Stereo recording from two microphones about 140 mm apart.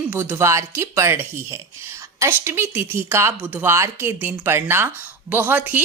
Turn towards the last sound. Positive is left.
turn(degrees=-10)  # may be behind; listen again after turning